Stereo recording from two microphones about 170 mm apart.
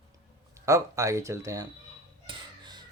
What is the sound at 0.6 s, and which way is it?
Speech, 20° right (ahead or behind).